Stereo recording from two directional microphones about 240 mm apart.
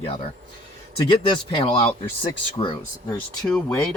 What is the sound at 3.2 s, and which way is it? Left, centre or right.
Speech, centre.